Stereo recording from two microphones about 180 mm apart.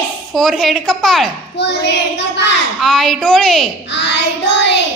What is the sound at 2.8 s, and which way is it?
Speech, centre (ahead or behind).